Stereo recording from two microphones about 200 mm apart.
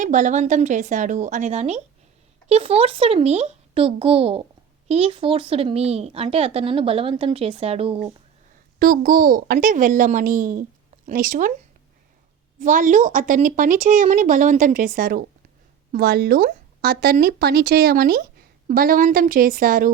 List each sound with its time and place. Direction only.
0.0 s speech: 40° right (ahead or behind)
8.8 s speech: 45° right (ahead or behind)
12.5 s speech: 40° right (ahead or behind)